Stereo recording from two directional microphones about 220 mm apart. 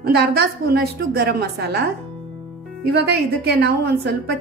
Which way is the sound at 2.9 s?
50° right (ahead or behind).